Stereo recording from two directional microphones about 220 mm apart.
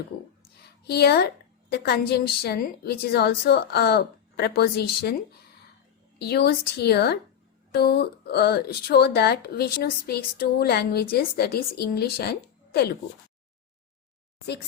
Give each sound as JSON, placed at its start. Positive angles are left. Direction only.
{"t": 0.9, "sound": "speech", "side_deg": 45}
{"t": 6.1, "sound": "speech", "side_deg": 45}